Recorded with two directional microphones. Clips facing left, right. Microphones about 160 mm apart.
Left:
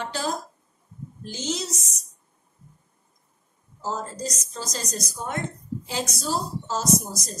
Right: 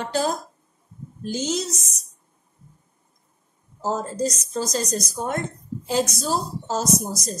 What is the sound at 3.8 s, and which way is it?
A woman's voice, 45° right (ahead or behind).